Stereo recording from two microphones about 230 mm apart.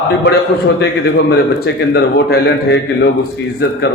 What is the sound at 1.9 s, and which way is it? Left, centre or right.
A man's voice, left.